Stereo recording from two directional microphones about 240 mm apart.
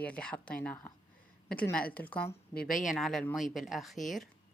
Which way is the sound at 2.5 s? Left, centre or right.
Left.